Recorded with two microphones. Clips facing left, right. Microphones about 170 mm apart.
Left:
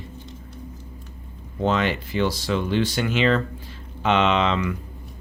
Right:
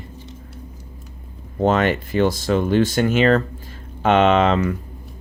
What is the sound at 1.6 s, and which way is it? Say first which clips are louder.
Speech: right 5 dB; 50° right (ahead or behind).